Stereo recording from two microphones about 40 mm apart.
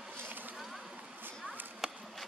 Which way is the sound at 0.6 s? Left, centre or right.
Centre.